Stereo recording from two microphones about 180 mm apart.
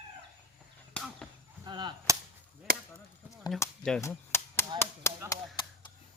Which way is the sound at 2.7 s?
55° right (ahead or behind).